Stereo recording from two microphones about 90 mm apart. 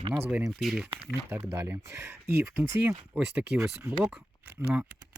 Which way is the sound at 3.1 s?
10° right (ahead or behind).